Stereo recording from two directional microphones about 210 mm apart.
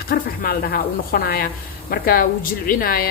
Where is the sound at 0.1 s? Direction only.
45° left (ahead or behind).